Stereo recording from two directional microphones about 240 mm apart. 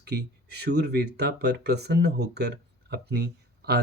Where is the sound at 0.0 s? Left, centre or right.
Right.